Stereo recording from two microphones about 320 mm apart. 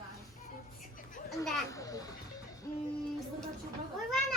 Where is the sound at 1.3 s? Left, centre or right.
Centre.